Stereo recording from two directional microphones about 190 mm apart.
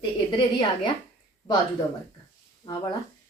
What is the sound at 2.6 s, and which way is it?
Speech, 30° left (ahead or behind).